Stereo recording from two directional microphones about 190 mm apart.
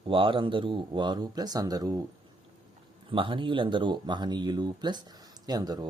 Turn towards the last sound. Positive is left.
turn(degrees=-20)  # may be behind; listen again after turning